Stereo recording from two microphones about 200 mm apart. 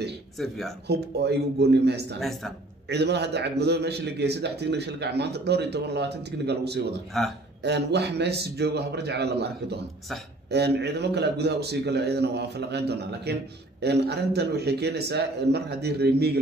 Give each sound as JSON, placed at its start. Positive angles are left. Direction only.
{"t": 0.4, "sound": "speech", "side_deg": 0}
{"t": 0.8, "sound": "a man's voice", "side_deg": -55}
{"t": 2.1, "sound": "speech", "side_deg": 0}
{"t": 2.9, "sound": "a man's voice", "side_deg": -60}